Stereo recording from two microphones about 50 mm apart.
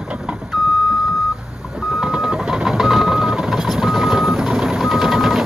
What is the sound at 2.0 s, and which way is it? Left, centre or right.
Vehicle, centre.